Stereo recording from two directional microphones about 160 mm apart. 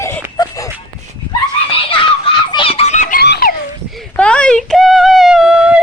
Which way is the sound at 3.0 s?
65° left (ahead or behind).